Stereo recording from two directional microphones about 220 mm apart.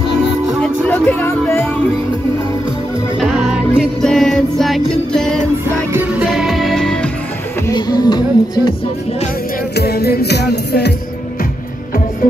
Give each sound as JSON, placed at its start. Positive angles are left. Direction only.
{"t": 0.6, "sound": "music", "side_deg": 5}
{"t": 3.2, "sound": "music", "side_deg": 0}
{"t": 7.6, "sound": "music", "side_deg": 20}
{"t": 9.8, "sound": "music", "side_deg": 45}